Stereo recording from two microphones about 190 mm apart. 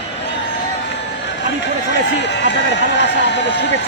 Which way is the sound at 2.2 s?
65° left (ahead or behind).